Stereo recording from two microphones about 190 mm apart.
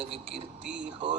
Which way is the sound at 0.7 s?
70° right (ahead or behind).